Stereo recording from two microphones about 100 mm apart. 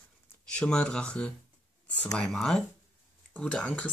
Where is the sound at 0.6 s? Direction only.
10° left (ahead or behind).